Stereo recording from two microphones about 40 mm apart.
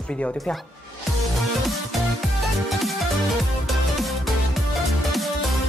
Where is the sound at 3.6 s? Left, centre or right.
Centre.